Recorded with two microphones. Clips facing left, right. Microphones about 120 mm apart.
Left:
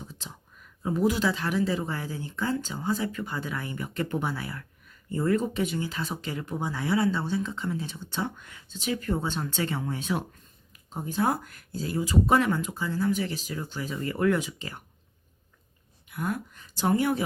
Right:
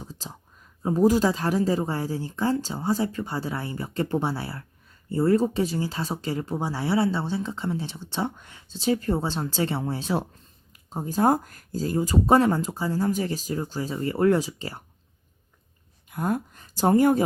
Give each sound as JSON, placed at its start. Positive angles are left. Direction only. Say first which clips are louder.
{"t": 0.0, "sound": "speech", "louder": "right 3 dB", "side_deg": -35}
{"t": 16.0, "sound": "speech", "louder": "right 5 dB", "side_deg": -40}